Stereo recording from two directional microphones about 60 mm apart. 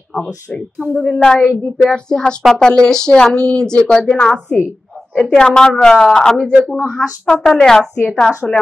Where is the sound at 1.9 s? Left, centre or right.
Centre.